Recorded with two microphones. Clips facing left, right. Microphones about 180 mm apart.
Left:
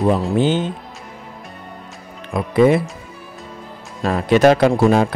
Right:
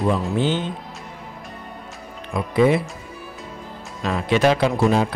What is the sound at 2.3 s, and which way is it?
Speech, 45° left (ahead or behind).